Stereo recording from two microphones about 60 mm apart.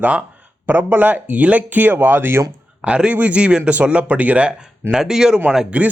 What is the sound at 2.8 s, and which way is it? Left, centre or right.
Speech, centre.